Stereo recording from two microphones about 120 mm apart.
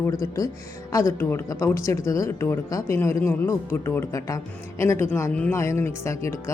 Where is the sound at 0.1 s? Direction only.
30° left (ahead or behind).